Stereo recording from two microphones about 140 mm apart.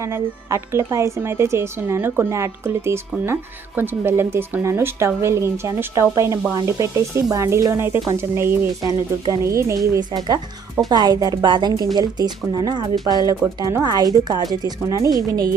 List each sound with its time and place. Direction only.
0.0 s speech: 20° right (ahead or behind)